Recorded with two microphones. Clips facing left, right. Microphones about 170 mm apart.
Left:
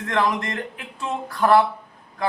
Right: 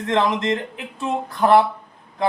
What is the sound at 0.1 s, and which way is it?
A man's voice, 25° right (ahead or behind).